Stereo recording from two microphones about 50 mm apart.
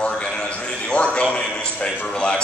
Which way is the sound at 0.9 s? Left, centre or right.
Left.